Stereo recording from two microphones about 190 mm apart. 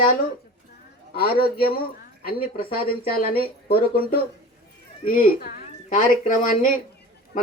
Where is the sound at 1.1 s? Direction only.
55° left (ahead or behind).